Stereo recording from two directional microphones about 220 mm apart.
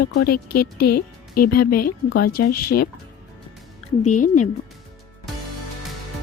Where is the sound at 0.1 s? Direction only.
45° left (ahead or behind).